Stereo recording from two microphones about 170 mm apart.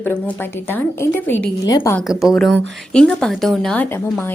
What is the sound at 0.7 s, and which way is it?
A woman's voice, 10° left (ahead or behind).